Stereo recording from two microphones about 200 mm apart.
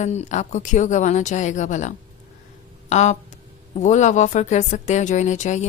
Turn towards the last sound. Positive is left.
turn(degrees=35)  # may be behind; listen again after turning